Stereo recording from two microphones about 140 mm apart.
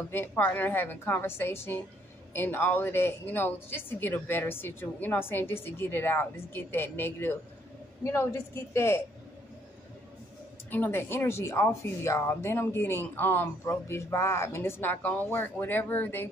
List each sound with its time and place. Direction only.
0.1 s a woman's voice: 15° left (ahead or behind)
10.7 s speech: 15° left (ahead or behind)